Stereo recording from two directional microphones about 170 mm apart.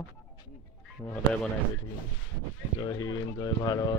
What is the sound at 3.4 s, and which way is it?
Speech, 25° left (ahead or behind).